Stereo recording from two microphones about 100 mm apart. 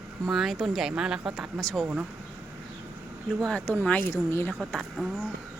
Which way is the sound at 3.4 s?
10° left (ahead or behind).